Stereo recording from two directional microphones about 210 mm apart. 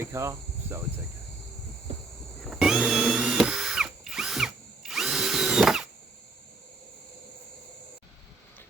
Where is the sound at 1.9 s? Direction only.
30° right (ahead or behind).